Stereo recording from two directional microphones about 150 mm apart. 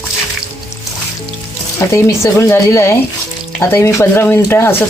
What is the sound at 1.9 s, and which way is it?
Speech, 20° left (ahead or behind).